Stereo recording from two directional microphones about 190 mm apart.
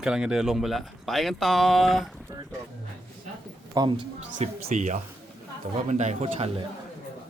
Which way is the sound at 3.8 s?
25° right (ahead or behind).